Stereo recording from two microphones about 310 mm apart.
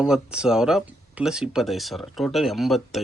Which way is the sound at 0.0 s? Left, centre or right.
Centre.